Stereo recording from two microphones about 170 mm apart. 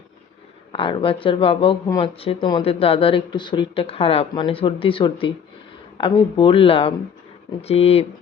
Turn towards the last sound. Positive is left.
turn(degrees=35)  # may be behind; listen again after turning